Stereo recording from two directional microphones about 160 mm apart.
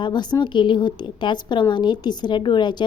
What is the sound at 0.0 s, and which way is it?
A woman's voice, 25° left (ahead or behind).